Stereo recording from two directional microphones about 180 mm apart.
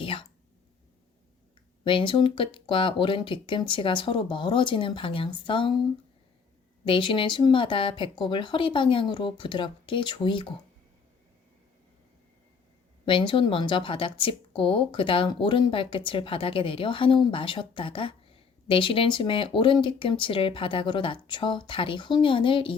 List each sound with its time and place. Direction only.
0.0 s a sound: 30° left (ahead or behind)
1.8 s speech: 30° left (ahead or behind)
6.8 s speech: 30° left (ahead or behind)
13.1 s speech: 30° left (ahead or behind)